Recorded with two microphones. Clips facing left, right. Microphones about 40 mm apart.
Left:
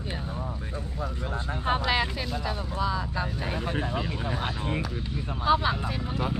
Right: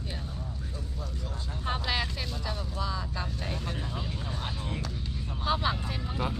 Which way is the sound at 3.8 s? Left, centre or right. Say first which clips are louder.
Left 7 dB; left.